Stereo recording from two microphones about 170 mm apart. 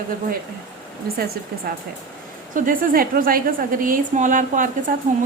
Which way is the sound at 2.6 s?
55° right (ahead or behind).